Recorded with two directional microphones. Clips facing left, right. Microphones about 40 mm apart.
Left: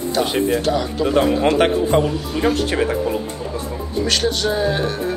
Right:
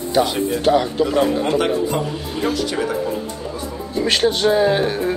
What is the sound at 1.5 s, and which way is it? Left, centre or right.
Speech, left.